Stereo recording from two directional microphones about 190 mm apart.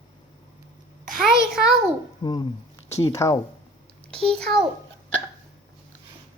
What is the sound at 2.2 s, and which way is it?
Speech, 25° left (ahead or behind).